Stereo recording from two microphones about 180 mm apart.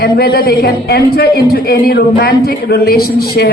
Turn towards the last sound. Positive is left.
turn(degrees=60)  # may be behind; listen again after turning